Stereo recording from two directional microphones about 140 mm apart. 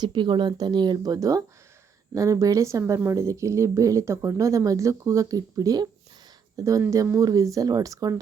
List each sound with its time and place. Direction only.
0.0 s speech: 35° right (ahead or behind)